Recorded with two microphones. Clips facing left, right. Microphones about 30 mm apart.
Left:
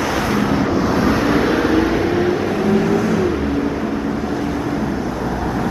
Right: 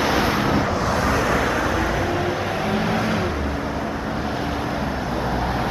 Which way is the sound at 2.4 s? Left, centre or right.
Centre.